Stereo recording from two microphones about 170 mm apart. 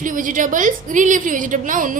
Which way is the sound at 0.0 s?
50° right (ahead or behind).